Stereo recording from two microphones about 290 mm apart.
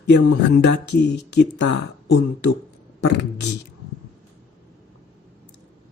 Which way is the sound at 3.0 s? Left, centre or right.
Left.